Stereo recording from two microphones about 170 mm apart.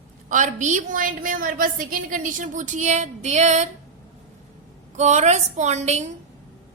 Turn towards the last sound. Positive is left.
turn(degrees=-40)  # may be behind; listen again after turning